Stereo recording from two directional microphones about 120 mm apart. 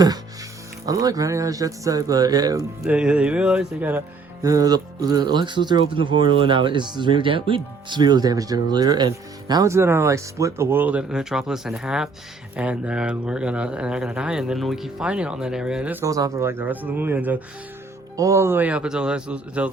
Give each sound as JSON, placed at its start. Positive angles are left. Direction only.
{"t": 0.9, "sound": "speech", "side_deg": -30}
{"t": 2.9, "sound": "speech", "side_deg": -10}
{"t": 4.4, "sound": "speech", "side_deg": -30}
{"t": 16.0, "sound": "speech", "side_deg": -30}
{"t": 18.2, "sound": "speech", "side_deg": -25}